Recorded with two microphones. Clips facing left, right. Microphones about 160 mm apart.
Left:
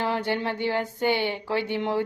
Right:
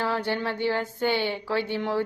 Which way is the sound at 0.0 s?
20° left (ahead or behind).